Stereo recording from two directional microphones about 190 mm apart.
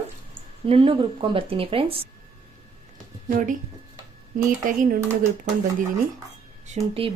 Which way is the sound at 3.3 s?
45° right (ahead or behind).